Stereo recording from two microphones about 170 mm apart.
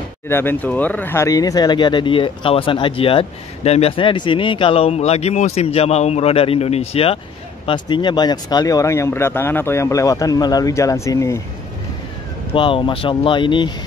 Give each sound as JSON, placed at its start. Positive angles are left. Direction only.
{"t": 0.3, "sound": "speech", "side_deg": 15}
{"t": 12.5, "sound": "speech", "side_deg": 30}